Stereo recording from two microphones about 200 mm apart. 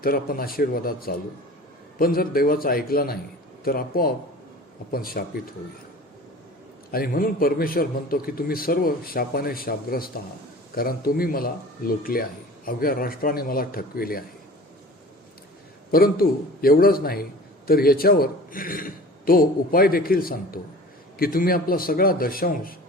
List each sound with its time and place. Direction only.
0.0 s a man's voice: 45° left (ahead or behind)
6.9 s a man's voice: 45° left (ahead or behind)
15.9 s a man's voice: 50° left (ahead or behind)